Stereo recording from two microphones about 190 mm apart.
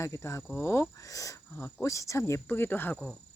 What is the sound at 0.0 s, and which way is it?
Speech, 15° left (ahead or behind).